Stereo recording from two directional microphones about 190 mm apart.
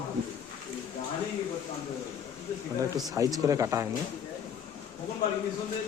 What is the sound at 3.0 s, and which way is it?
Speech, 20° right (ahead or behind).